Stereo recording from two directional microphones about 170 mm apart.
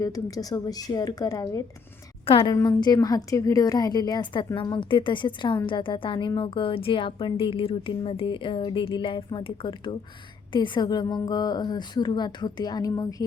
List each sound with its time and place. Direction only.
0.0 s a woman's voice: 20° left (ahead or behind)
2.2 s a woman's voice: 30° left (ahead or behind)